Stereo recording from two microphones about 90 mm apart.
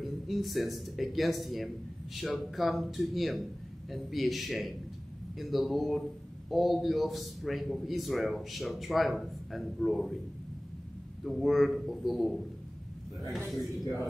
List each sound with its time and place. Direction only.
0.0 s a man's voice: centre (ahead or behind)
11.2 s a man's voice: centre (ahead or behind)
13.5 s a man's voice: centre (ahead or behind)